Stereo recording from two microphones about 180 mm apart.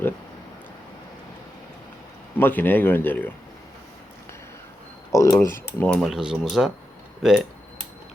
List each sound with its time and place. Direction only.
2.4 s speech: 10° left (ahead or behind)
5.1 s speech: 15° left (ahead or behind)
6.0 s speech: centre (ahead or behind)